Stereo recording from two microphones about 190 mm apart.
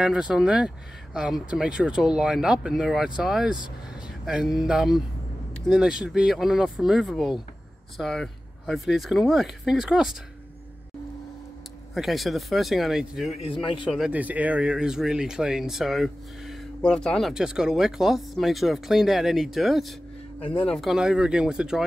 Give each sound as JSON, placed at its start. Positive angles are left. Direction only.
{"t": 0.0, "sound": "speech", "side_deg": -5}
{"t": 11.9, "sound": "speech", "side_deg": 0}
{"t": 13.4, "sound": "a man's voice", "side_deg": 25}
{"t": 13.8, "sound": "speech", "side_deg": 0}
{"t": 20.3, "sound": "speech", "side_deg": 30}
{"t": 20.7, "sound": "speech", "side_deg": 0}